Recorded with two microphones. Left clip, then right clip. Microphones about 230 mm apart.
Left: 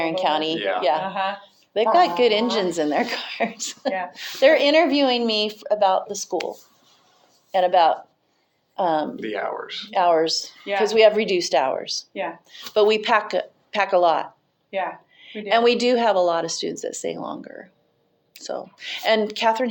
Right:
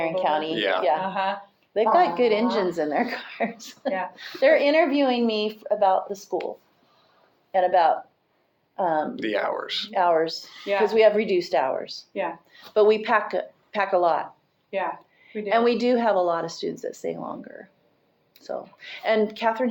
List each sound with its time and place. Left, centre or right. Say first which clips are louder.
0.0 s speech: left 2 dB; left
0.5 s speech: even; right
0.8 s speech: left 3 dB; left
1.0 s speech: left 1 dB; centre
1.7 s speech: left 2 dB; left
7.5 s speech: left 2 dB; left
9.2 s speech: right 1 dB; right
9.9 s speech: left 3 dB; left
14.7 s speech: left 2 dB; centre
15.4 s speech: left 3 dB; left